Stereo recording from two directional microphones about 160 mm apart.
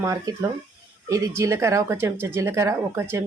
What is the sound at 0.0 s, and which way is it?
Speech, 20° right (ahead or behind).